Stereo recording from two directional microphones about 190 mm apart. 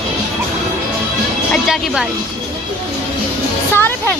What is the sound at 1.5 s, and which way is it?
Music, 5° right (ahead or behind).